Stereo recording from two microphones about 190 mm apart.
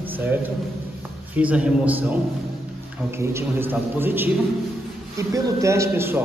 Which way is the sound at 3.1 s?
15° right (ahead or behind).